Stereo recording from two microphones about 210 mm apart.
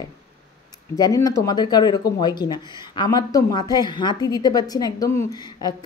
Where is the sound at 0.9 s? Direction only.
15° left (ahead or behind).